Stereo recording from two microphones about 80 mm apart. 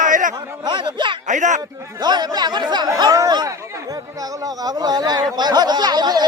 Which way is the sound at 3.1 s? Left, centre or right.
Right.